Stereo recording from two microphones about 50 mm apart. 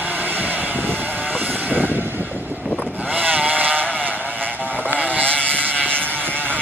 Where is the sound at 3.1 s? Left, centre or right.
Right.